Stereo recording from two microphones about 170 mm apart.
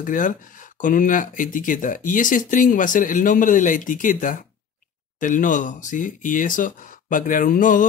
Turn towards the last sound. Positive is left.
turn(degrees=50)  # may be behind; listen again after turning